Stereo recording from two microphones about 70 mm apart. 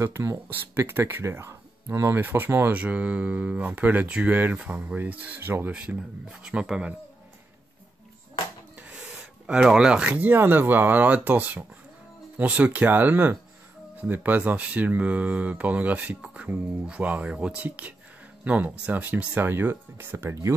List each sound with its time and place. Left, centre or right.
0.0 s speech: right
0.5 s speech: right
2.8 s speech: right
5.7 s speech: centre
9.5 s speech: centre
10.3 s speech: right